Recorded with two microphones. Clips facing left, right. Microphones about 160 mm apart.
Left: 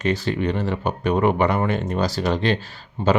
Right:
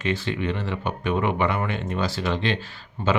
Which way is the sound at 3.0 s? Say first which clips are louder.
Left 4 dB; 25° left (ahead or behind).